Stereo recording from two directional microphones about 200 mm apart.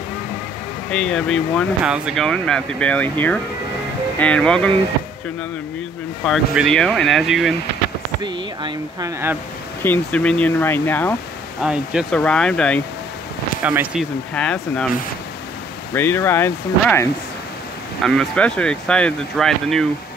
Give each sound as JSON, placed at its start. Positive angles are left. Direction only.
{"t": 0.9, "sound": "speech", "side_deg": 5}
{"t": 6.2, "sound": "speech", "side_deg": 0}
{"t": 8.2, "sound": "speech", "side_deg": -20}
{"t": 9.8, "sound": "speech", "side_deg": 5}
{"t": 11.6, "sound": "speech", "side_deg": -5}
{"t": 13.6, "sound": "speech", "side_deg": -5}
{"t": 14.3, "sound": "speech", "side_deg": 5}
{"t": 15.9, "sound": "speech", "side_deg": 10}